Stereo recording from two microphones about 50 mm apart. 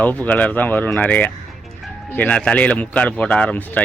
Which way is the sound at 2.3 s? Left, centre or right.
Left.